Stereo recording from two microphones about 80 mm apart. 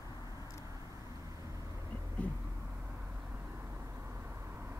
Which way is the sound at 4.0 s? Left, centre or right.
Right.